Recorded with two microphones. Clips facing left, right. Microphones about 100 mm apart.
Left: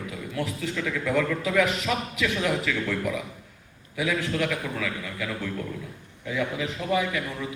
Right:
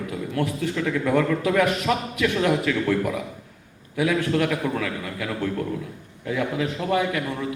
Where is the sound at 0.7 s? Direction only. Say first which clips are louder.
Right 4 dB; 30° right (ahead or behind).